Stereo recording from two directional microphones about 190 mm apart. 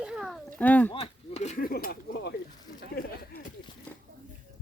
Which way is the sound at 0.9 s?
35° left (ahead or behind).